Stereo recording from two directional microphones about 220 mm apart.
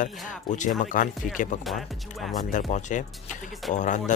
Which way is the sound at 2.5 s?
35° left (ahead or behind).